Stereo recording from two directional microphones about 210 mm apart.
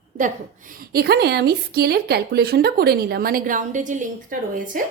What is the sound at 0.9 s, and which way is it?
A woman's voice, 50° right (ahead or behind).